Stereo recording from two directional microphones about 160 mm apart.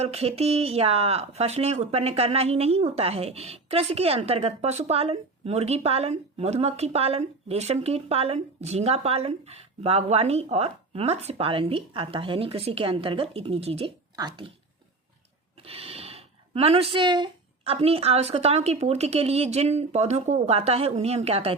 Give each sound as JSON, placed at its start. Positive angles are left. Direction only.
{"t": 0.0, "sound": "speech", "side_deg": -40}
{"t": 15.6, "sound": "speech", "side_deg": -35}